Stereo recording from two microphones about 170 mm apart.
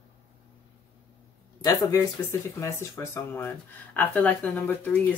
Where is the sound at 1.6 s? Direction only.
20° left (ahead or behind).